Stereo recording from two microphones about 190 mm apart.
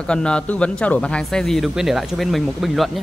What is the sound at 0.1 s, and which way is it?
Speech, 5° left (ahead or behind).